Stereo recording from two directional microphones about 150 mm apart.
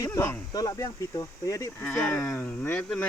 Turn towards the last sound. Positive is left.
turn(degrees=10)  # may be behind; listen again after turning